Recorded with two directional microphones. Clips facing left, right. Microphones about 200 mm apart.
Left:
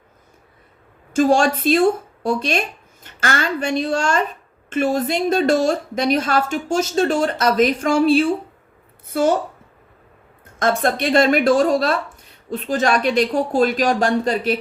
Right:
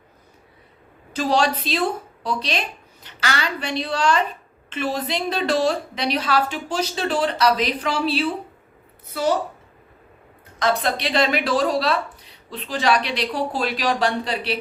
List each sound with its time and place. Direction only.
1.1 s a woman's voice: 50° left (ahead or behind)
10.6 s a woman's voice: 50° left (ahead or behind)